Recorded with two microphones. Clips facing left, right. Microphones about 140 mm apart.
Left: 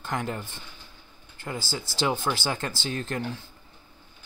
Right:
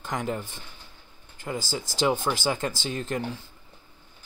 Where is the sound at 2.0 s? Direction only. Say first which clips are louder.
Right 2 dB; centre (ahead or behind).